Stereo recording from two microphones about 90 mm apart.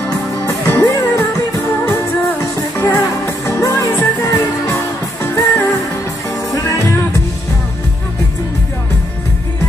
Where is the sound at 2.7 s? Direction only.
35° left (ahead or behind).